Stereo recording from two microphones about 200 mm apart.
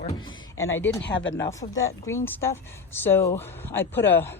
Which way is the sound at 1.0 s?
65° left (ahead or behind).